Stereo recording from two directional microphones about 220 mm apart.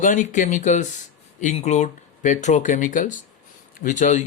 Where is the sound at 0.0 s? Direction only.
35° left (ahead or behind).